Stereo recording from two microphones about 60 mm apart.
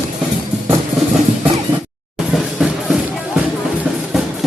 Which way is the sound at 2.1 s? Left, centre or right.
Centre.